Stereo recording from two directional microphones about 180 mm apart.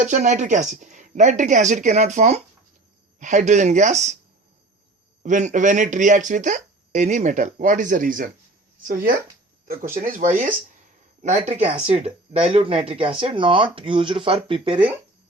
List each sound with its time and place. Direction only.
0.0 s speech: 40° right (ahead or behind)
5.2 s speech: 45° right (ahead or behind)